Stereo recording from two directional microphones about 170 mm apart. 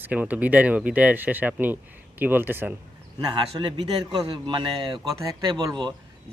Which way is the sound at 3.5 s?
30° right (ahead or behind).